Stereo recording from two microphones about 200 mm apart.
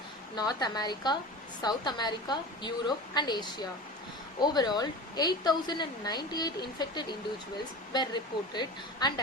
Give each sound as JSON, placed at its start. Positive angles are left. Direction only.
{"t": 0.3, "sound": "a woman's voice", "side_deg": 20}